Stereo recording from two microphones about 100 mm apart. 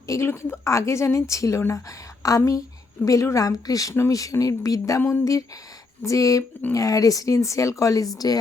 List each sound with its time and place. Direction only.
0.1 s a woman's voice: 25° left (ahead or behind)